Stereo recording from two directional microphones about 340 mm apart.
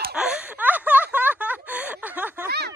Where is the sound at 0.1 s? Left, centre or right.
Centre.